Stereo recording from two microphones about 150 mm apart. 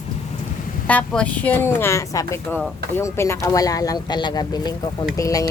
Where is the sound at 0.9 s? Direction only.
10° left (ahead or behind).